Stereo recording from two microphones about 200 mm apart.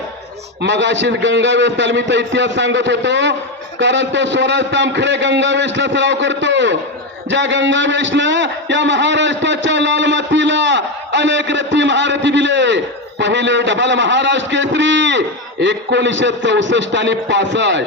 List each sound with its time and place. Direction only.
0.6 s a man's voice: 65° right (ahead or behind)